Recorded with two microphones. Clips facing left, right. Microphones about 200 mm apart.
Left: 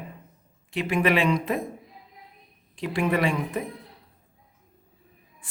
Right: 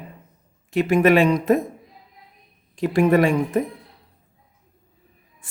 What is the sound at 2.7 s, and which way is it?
Speech, 45° right (ahead or behind).